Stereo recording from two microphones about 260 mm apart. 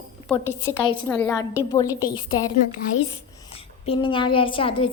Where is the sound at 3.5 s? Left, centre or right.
Left.